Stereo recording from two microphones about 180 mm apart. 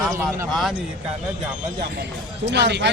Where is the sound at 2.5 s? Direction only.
75° right (ahead or behind).